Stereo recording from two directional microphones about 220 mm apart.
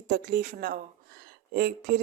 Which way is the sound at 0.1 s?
40° right (ahead or behind).